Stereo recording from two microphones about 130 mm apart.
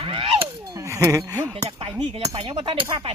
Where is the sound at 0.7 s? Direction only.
25° right (ahead or behind).